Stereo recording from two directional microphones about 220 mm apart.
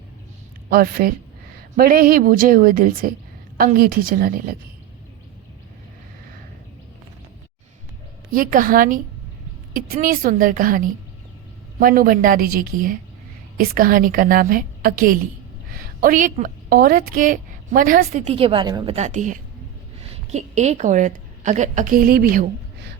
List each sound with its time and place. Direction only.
0.7 s a woman's voice: 40° right (ahead or behind)
8.3 s a woman's voice: 40° right (ahead or behind); by 18.9 s 20° right (ahead or behind)
18.9 s a woman's voice: 35° right (ahead or behind)